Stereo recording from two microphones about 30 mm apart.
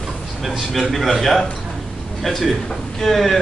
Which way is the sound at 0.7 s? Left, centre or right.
Centre.